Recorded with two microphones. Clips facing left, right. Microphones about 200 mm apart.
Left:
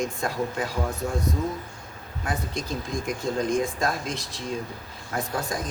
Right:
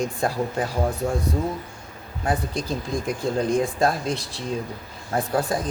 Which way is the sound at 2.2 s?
35° right (ahead or behind).